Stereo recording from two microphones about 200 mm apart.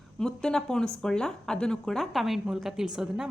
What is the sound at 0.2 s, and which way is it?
Speech, 5° left (ahead or behind).